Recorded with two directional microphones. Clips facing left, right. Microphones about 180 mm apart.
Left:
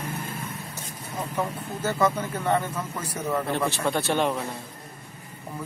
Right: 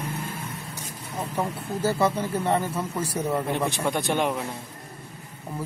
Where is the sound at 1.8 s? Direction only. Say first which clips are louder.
Right 1 dB; 30° right (ahead or behind).